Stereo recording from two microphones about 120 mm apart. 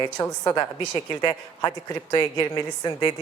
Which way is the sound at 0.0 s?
35° left (ahead or behind).